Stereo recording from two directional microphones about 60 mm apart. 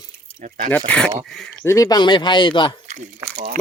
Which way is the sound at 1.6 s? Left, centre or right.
Left.